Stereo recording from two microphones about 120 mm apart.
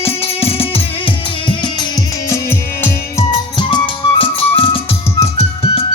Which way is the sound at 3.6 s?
40° left (ahead or behind).